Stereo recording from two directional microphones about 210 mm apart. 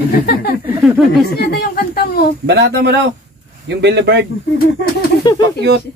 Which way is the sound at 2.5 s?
55° right (ahead or behind).